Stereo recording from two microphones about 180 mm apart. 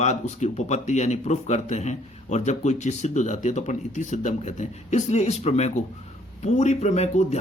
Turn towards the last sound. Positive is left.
turn(degrees=40)  # may be behind; listen again after turning